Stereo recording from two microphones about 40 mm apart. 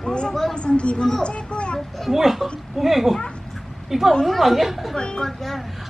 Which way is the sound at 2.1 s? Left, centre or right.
Centre.